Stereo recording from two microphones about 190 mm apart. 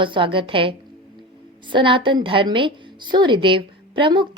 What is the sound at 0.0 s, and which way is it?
A woman's voice, 25° right (ahead or behind).